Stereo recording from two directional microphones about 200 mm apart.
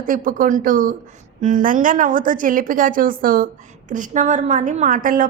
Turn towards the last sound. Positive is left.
turn(degrees=-45)  # may be behind; listen again after turning